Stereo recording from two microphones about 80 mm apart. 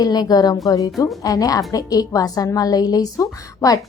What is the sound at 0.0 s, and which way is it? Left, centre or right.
A woman's voice, left.